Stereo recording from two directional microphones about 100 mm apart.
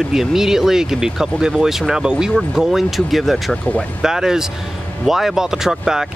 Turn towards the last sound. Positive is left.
turn(degrees=-5)  # may be behind; listen again after turning